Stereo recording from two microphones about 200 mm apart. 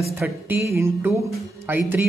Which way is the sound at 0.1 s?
15° right (ahead or behind).